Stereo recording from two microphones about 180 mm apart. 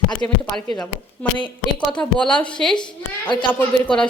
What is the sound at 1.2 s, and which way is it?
A woman's voice, 5° left (ahead or behind).